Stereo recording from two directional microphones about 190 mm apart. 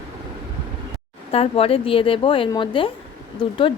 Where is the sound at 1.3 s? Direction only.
30° left (ahead or behind).